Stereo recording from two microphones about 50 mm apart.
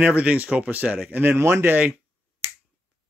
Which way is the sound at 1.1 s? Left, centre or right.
Right.